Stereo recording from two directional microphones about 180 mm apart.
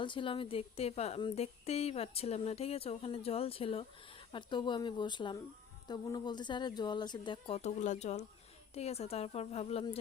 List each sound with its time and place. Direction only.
0.0 s speech: 30° left (ahead or behind)